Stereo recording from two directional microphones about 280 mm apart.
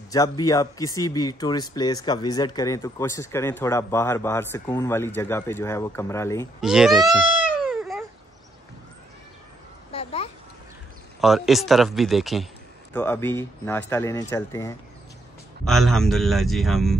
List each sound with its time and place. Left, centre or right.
0.1 s speech: centre
6.6 s a man's voice: centre
7.7 s cat: centre
9.9 s a sound: left
11.1 s a man's voice: centre